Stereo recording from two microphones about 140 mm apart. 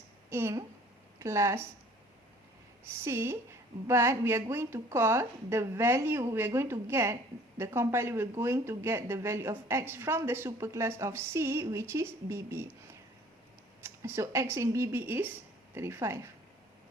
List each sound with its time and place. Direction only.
0.3 s speech: 20° right (ahead or behind)
3.0 s speech: 20° right (ahead or behind)
13.8 s speech: 15° right (ahead or behind)